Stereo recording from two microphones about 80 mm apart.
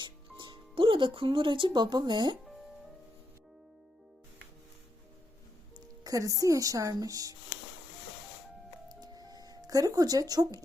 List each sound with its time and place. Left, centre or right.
0.0 s speech: right
5.7 s speech: right
8.9 s music: right